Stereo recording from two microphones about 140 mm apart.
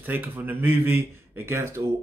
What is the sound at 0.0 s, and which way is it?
Speech, 15° right (ahead or behind).